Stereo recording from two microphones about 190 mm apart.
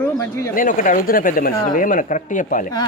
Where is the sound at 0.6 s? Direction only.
45° left (ahead or behind).